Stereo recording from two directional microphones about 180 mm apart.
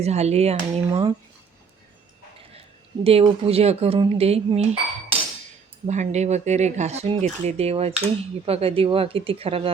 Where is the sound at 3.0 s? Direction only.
30° right (ahead or behind).